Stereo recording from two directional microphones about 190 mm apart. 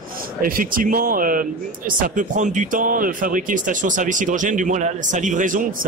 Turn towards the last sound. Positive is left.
turn(degrees=-45)  # may be behind; listen again after turning